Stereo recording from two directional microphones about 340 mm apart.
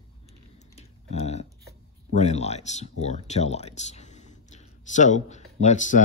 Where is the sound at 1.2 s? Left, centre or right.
Centre.